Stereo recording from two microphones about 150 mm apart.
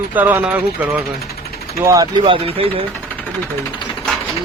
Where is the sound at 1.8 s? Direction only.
25° right (ahead or behind).